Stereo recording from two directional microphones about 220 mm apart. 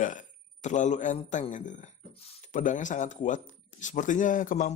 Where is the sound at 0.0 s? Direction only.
35° left (ahead or behind).